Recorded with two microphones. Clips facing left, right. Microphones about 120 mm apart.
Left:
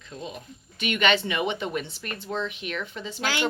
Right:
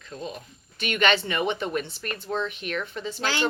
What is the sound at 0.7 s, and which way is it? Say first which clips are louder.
Speech: even; 45° right (ahead or behind).